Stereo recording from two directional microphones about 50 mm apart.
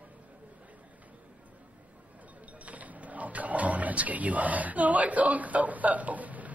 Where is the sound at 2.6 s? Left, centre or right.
Right.